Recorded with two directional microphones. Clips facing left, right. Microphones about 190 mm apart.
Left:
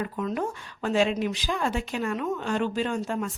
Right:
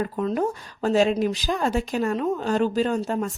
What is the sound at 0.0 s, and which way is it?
Speech, 35° right (ahead or behind).